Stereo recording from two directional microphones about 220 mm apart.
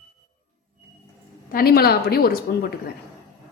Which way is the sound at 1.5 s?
40° left (ahead or behind).